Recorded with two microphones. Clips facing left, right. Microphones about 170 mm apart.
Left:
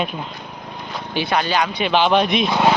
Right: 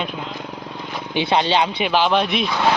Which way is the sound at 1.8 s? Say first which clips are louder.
Left 2 dB; 5° right (ahead or behind).